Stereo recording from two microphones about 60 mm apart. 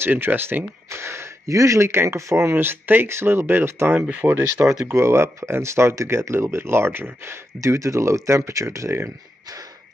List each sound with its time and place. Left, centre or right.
0.0 s speech: right
0.8 s speech: right
4.9 s speech: right
7.6 s speech: right